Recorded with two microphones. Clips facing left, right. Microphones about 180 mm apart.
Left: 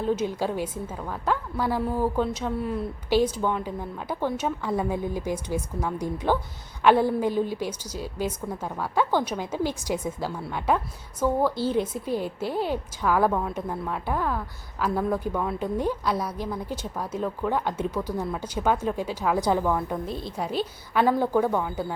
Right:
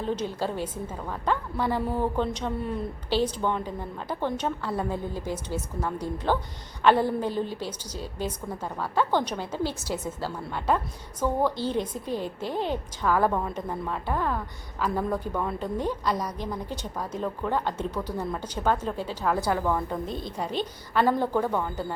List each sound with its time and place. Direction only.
0.0 s a woman's voice: 10° left (ahead or behind)
19.7 s a woman's voice: 5° left (ahead or behind)